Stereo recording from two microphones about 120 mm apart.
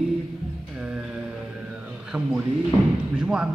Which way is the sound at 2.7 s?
50° left (ahead or behind).